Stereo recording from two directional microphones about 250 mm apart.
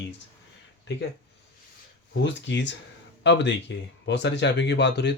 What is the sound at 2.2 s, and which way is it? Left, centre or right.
Speech, left.